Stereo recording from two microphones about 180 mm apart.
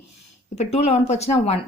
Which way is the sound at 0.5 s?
35° left (ahead or behind).